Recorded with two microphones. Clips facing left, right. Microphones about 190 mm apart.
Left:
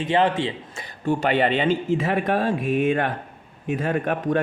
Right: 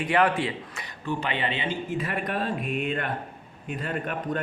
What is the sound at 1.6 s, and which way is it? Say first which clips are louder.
Speech: left 8 dB; 90° left.